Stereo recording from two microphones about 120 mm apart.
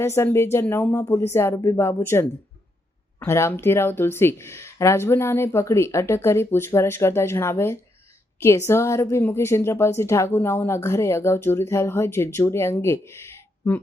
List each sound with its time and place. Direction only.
0.0 s a woman's voice: 20° left (ahead or behind)
3.2 s a woman's voice: 20° left (ahead or behind)